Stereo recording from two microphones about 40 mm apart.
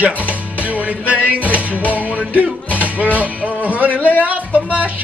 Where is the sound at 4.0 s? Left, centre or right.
Left.